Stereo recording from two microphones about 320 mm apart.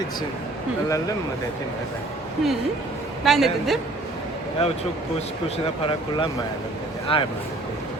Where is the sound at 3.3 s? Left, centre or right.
Centre.